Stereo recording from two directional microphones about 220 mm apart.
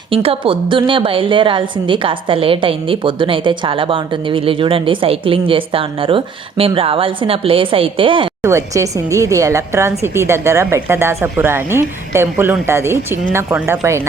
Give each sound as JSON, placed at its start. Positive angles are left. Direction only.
{"t": 0.1, "sound": "a woman's voice", "side_deg": -25}